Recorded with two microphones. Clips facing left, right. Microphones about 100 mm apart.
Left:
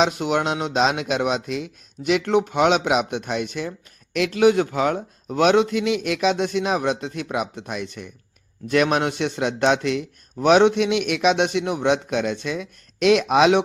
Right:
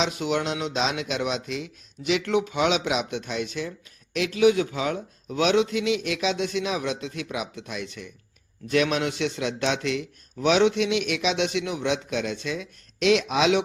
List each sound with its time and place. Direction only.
0.0 s speech: 50° left (ahead or behind)